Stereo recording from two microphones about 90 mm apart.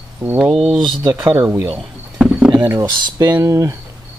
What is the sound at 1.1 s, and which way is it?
Speech, 45° right (ahead or behind).